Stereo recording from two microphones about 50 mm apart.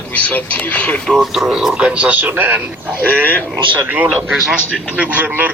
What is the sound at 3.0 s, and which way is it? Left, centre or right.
Speech, left.